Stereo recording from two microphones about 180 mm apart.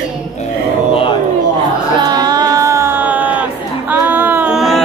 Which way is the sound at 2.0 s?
20° right (ahead or behind).